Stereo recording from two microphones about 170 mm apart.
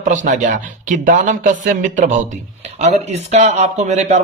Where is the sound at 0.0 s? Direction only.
50° right (ahead or behind).